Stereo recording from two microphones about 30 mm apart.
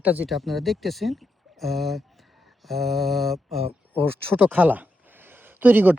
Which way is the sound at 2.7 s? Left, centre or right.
Centre.